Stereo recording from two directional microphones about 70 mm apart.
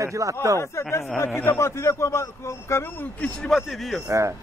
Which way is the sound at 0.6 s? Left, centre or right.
Left.